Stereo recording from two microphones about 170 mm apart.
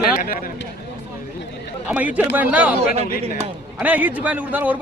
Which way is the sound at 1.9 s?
10° right (ahead or behind).